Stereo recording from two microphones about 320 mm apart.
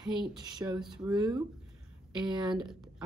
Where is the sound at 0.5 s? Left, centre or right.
Centre.